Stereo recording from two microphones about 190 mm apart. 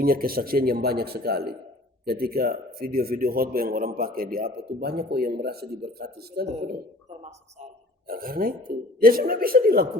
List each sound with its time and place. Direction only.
0.0 s a man's voice: 50° right (ahead or behind)
8.0 s a man's voice: 50° right (ahead or behind)